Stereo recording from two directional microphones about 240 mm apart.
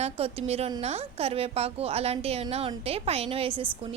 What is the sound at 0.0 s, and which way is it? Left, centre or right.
A woman's voice, right.